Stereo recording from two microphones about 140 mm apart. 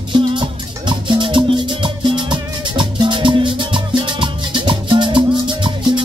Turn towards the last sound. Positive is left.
turn(degrees=-35)  # may be behind; listen again after turning